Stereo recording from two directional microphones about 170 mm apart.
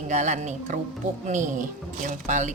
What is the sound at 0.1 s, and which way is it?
Speech, 45° right (ahead or behind).